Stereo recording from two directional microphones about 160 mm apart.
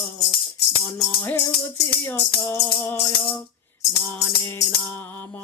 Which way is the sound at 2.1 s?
15° left (ahead or behind).